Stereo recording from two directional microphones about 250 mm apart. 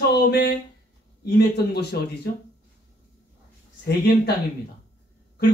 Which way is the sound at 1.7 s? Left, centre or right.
Left.